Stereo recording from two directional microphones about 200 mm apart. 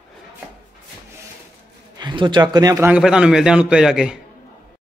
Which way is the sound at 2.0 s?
25° right (ahead or behind).